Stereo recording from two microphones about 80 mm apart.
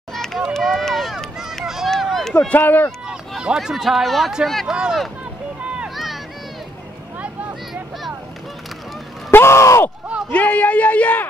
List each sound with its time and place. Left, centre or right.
0.1 s run: centre
2.4 s speech: left
3.1 s speech: centre
9.3 s speech: left
10.3 s a man's voice: centre